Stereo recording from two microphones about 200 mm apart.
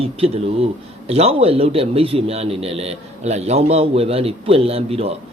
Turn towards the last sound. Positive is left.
turn(degrees=-30)  # may be behind; listen again after turning